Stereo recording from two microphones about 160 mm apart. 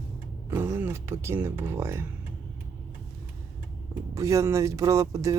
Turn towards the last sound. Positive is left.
turn(degrees=-20)  # may be behind; listen again after turning